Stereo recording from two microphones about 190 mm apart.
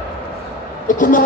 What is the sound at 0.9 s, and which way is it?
Speech, 45° left (ahead or behind).